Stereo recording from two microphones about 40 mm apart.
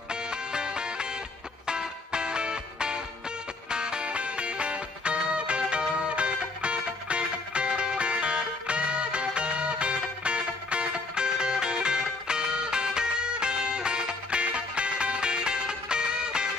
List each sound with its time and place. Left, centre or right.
0.1 s music: right